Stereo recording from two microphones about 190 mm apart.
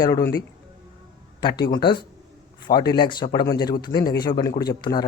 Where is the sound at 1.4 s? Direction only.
25° left (ahead or behind).